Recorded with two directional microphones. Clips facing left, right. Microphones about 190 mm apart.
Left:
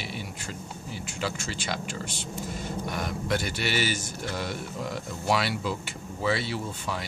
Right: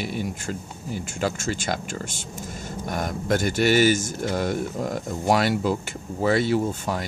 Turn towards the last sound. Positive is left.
turn(degrees=-45)  # may be behind; listen again after turning